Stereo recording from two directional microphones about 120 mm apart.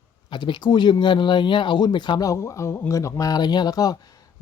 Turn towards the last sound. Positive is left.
turn(degrees=30)  # may be behind; listen again after turning